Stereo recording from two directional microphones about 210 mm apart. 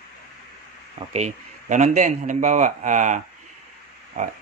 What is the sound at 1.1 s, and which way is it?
A man's voice, 35° right (ahead or behind).